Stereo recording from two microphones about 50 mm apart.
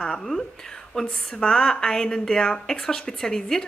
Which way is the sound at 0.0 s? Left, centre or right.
Centre.